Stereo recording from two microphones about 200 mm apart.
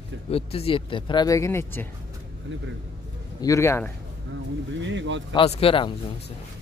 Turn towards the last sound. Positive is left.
turn(degrees=30)  # may be behind; listen again after turning